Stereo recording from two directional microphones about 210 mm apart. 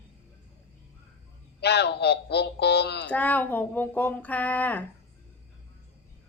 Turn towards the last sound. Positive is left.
turn(degrees=10)  # may be behind; listen again after turning